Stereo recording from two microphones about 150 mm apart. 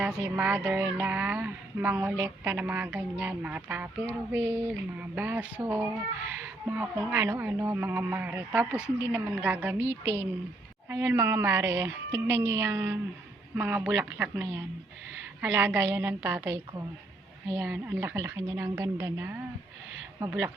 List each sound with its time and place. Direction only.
0.0 s speech: 10° right (ahead or behind)